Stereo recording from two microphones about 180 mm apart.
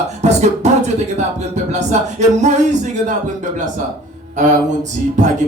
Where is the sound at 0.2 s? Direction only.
40° right (ahead or behind).